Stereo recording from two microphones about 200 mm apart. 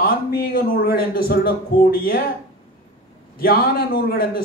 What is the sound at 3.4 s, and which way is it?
A man's voice, 50° left (ahead or behind).